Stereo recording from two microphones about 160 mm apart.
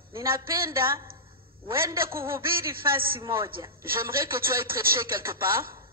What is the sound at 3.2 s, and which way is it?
Speech, 30° right (ahead or behind).